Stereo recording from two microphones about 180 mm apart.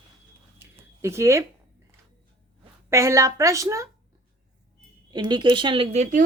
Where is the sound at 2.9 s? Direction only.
15° right (ahead or behind).